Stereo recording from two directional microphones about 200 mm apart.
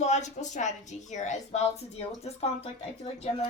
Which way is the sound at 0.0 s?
35° left (ahead or behind).